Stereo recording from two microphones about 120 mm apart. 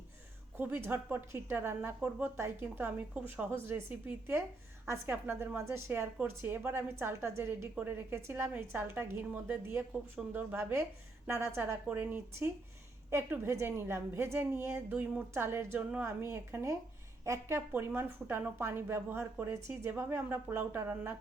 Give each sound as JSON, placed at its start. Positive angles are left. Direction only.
{"t": 0.5, "sound": "speech", "side_deg": -15}
{"t": 2.0, "sound": "speech", "side_deg": -10}